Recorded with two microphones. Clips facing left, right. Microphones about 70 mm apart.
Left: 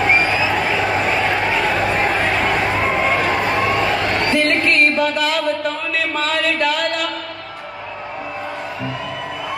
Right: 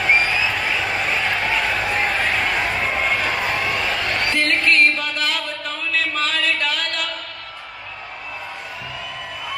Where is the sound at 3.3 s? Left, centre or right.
Left.